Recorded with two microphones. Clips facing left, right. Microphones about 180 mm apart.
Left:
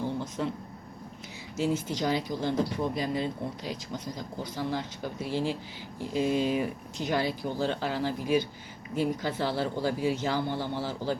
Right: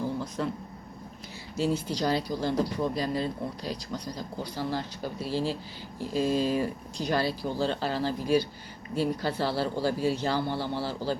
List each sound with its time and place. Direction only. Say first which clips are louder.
0.4 s speech: even; 15° left (ahead or behind)
1.5 s speech: right 1 dB; 20° left (ahead or behind)